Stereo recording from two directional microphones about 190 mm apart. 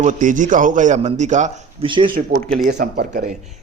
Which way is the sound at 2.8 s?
45° right (ahead or behind).